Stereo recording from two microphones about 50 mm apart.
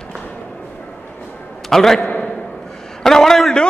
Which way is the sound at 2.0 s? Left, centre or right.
Left.